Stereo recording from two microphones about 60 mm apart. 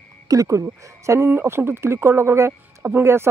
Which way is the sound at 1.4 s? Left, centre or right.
Right.